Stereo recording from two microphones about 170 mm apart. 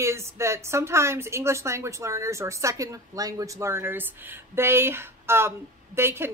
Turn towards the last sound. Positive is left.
turn(degrees=-15)  # may be behind; listen again after turning